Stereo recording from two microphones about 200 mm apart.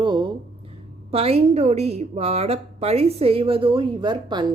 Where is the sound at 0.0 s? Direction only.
20° right (ahead or behind).